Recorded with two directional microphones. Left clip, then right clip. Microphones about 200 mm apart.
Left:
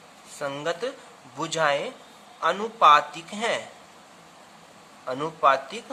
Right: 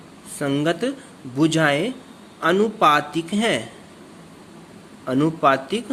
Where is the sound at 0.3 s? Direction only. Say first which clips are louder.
Right 7 dB; 10° right (ahead or behind).